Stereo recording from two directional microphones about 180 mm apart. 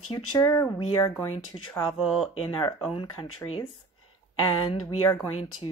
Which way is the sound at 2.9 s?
30° left (ahead or behind).